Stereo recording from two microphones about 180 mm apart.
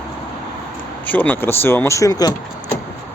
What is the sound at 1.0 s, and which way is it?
Speech, 10° left (ahead or behind).